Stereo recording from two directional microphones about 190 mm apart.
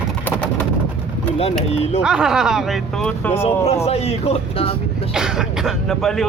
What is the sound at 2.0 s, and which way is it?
Speech, 5° right (ahead or behind).